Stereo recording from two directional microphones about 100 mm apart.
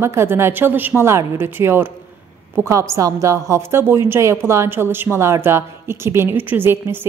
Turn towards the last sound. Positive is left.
turn(degrees=-20)  # may be behind; listen again after turning